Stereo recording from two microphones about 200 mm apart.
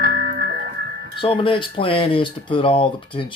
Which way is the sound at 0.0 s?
50° right (ahead or behind).